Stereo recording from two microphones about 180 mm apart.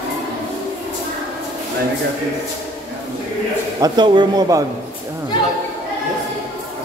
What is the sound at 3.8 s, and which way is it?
Speech, 25° right (ahead or behind).